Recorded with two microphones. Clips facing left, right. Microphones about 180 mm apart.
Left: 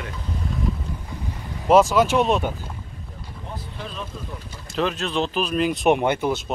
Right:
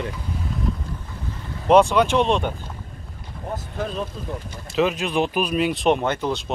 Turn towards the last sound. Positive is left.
turn(degrees=5)  # may be behind; listen again after turning